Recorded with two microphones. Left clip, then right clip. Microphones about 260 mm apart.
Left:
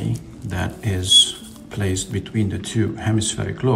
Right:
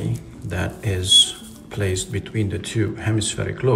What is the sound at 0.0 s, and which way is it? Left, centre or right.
Speech, centre.